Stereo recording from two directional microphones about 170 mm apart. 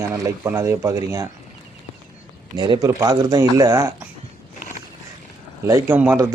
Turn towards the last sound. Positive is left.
turn(degrees=-15)  # may be behind; listen again after turning